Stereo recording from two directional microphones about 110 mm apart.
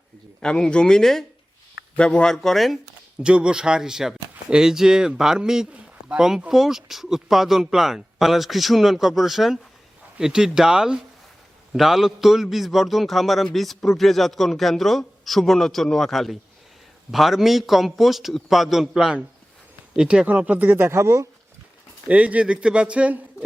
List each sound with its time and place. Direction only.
0.3 s a man's voice: 5° left (ahead or behind)
3.2 s a man's voice: 10° right (ahead or behind); by 21.2 s 25° right (ahead or behind)
22.1 s speech: 10° right (ahead or behind)